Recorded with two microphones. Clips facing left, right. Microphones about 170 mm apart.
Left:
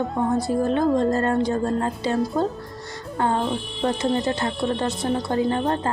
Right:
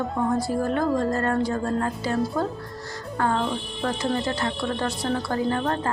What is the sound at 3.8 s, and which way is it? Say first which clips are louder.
Speech: left 4 dB; 25° left (ahead or behind).